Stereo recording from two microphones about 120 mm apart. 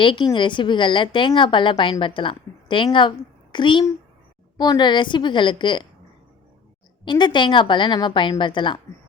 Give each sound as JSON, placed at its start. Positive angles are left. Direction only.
{"t": 0.0, "sound": "a woman's voice", "side_deg": 45}
{"t": 7.0, "sound": "a woman's voice", "side_deg": 40}